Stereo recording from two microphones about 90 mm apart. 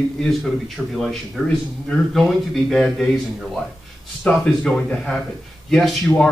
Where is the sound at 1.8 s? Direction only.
Centre (ahead or behind).